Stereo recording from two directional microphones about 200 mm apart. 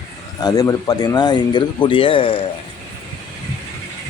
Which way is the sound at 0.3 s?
20° left (ahead or behind).